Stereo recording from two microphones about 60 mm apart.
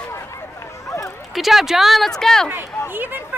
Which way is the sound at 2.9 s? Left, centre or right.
Right.